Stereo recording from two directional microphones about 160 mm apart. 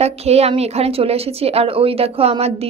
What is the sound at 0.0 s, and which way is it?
A woman's voice, 40° right (ahead or behind).